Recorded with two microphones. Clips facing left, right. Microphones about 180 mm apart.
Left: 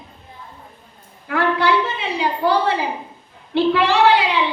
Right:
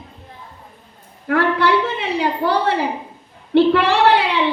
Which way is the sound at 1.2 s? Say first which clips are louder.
Right 2 dB; 60° right (ahead or behind).